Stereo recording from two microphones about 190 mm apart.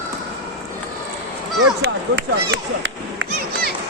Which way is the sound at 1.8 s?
60° right (ahead or behind).